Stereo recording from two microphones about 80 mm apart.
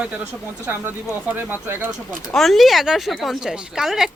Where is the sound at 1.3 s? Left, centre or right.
Right.